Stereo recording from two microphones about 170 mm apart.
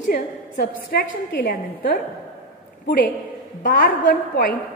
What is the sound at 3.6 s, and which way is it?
Speech, 60° left (ahead or behind).